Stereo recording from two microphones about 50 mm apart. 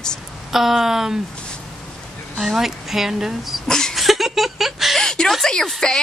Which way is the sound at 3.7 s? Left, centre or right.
Centre.